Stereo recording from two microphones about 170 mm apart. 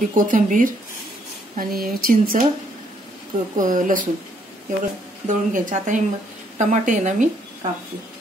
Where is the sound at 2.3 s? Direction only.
50° right (ahead or behind).